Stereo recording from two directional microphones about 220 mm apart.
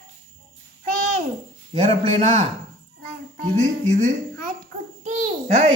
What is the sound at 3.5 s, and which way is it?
Speech, 35° right (ahead or behind).